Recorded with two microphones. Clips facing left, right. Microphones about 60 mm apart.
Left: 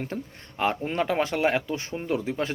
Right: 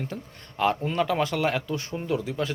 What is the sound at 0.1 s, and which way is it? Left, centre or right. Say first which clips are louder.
Speech: left 3 dB; left.